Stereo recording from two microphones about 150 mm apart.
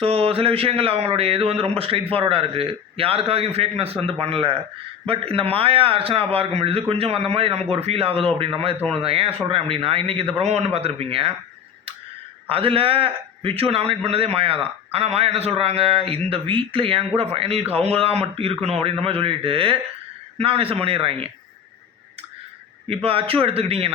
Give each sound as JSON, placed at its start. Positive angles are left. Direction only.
{"t": 0.0, "sound": "a man's voice", "side_deg": -40}
{"t": 12.5, "sound": "a man's voice", "side_deg": -40}
{"t": 22.9, "sound": "a man's voice", "side_deg": -40}